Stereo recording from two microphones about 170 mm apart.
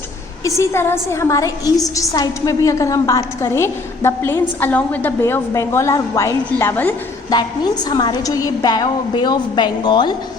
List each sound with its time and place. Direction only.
0.4 s a woman's voice: 15° left (ahead or behind)
7.3 s a woman's voice: 25° left (ahead or behind)